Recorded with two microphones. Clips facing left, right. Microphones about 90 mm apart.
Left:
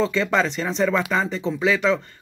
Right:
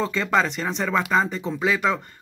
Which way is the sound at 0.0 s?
40° right (ahead or behind).